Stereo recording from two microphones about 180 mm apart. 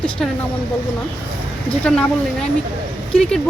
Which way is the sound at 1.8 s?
5° left (ahead or behind).